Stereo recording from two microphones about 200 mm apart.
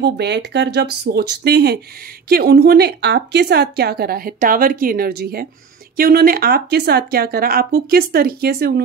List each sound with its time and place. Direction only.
0.0 s a woman's voice: 55° right (ahead or behind)